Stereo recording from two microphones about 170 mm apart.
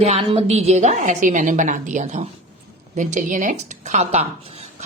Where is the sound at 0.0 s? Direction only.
35° right (ahead or behind).